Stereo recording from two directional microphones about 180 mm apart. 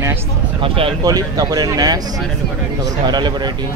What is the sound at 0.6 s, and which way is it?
Speech, 30° right (ahead or behind).